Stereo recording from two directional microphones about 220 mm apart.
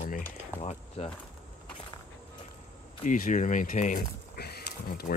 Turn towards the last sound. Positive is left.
turn(degrees=45)  # may be behind; listen again after turning